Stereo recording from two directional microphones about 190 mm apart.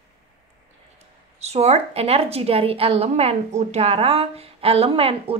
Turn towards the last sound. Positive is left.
turn(degrees=-30)  # may be behind; listen again after turning